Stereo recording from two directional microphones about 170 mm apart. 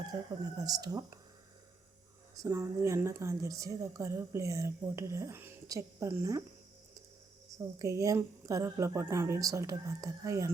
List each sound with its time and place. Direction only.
0.1 s speech: 20° right (ahead or behind)
2.3 s speech: 20° right (ahead or behind)
7.6 s speech: 20° right (ahead or behind)